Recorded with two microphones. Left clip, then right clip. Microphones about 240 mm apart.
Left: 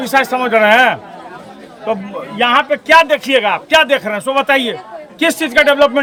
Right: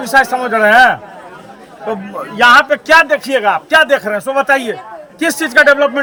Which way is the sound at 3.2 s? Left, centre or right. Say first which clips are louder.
Even; centre.